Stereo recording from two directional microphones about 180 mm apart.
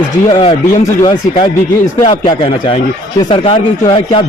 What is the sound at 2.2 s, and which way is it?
Speech, 30° left (ahead or behind).